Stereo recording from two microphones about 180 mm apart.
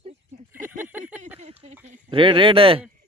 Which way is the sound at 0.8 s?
10° right (ahead or behind).